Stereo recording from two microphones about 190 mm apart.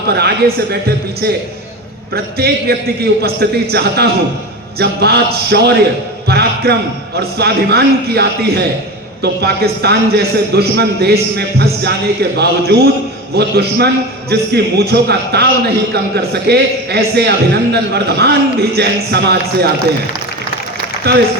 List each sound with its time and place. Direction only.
0.1 s a man's voice: 60° right (ahead or behind)
6.2 s a sound: 60° right (ahead or behind)
7.2 s a man's voice: 60° right (ahead or behind)
21.0 s a man's voice: 60° right (ahead or behind)